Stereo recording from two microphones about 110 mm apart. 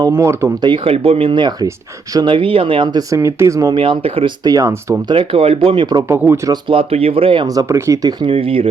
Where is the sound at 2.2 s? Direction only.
50° right (ahead or behind).